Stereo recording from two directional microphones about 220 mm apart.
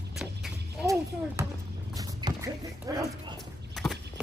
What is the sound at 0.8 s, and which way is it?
Speech, 15° right (ahead or behind).